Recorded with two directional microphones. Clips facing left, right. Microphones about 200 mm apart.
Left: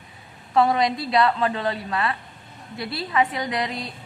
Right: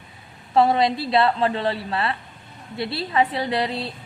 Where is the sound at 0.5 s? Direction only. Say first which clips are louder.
Right 2 dB; 30° right (ahead or behind).